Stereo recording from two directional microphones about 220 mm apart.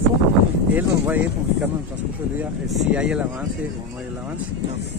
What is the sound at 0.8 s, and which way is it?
Speech, 5° right (ahead or behind).